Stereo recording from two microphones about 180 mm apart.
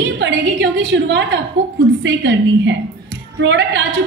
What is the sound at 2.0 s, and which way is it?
A woman's voice, 80° right.